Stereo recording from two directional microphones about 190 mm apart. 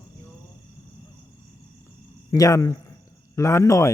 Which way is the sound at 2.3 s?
20° left (ahead or behind).